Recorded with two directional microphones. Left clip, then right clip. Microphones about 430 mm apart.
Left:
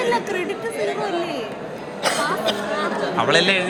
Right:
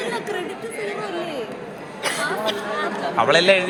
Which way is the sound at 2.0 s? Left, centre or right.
Left.